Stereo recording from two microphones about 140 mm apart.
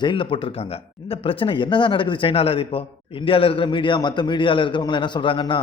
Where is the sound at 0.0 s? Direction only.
35° left (ahead or behind).